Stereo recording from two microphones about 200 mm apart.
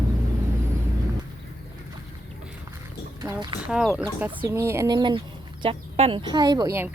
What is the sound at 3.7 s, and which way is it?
Speech, 5° right (ahead or behind).